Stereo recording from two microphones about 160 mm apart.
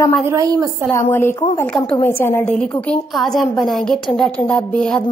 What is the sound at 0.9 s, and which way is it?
A woman's voice, 15° left (ahead or behind).